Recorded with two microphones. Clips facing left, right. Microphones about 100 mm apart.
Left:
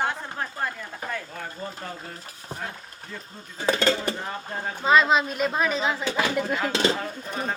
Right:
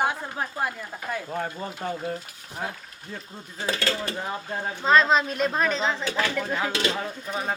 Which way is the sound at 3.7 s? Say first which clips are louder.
Left 5 dB; 30° left (ahead or behind).